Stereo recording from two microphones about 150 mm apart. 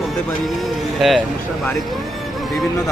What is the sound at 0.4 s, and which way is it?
Speech, centre (ahead or behind).